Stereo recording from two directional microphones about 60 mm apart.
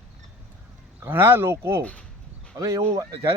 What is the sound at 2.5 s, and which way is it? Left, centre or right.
Speech, right.